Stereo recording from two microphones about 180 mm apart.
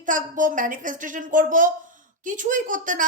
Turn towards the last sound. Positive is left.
turn(degrees=-50)  # may be behind; listen again after turning